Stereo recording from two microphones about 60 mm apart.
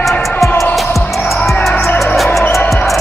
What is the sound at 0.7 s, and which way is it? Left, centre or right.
Music, centre.